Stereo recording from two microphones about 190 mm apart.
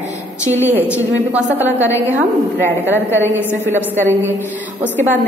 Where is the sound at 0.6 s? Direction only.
10° right (ahead or behind).